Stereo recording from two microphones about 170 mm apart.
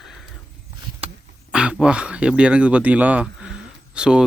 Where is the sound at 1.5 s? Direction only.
5° right (ahead or behind).